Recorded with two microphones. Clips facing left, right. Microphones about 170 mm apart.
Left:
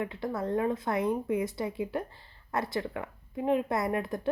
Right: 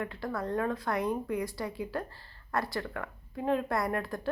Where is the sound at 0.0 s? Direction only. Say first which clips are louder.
Left 2 dB; 20° left (ahead or behind).